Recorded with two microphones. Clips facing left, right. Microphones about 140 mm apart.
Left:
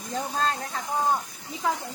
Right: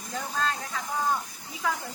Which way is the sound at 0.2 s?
35° left (ahead or behind).